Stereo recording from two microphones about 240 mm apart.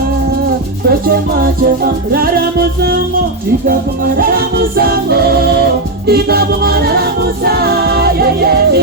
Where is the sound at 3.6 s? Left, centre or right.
Right.